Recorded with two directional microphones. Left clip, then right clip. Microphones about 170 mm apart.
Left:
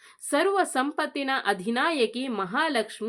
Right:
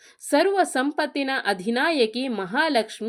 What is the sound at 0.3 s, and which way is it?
A woman's voice, 5° right (ahead or behind).